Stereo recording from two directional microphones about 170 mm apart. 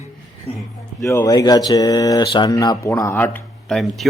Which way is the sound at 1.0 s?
20° left (ahead or behind).